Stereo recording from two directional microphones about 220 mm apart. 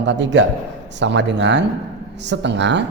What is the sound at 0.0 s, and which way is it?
A man's voice, 55° right (ahead or behind).